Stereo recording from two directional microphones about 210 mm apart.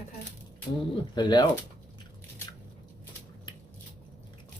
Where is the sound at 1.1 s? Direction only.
20° left (ahead or behind).